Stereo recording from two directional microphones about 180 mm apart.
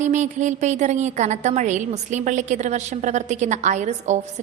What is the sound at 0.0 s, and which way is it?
A woman's voice, 40° right (ahead or behind).